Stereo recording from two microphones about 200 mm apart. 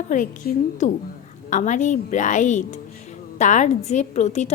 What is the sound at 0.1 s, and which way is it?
A woman's voice, 40° left (ahead or behind).